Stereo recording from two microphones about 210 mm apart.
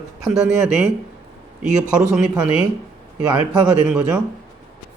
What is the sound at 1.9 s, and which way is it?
Speech, 5° right (ahead or behind).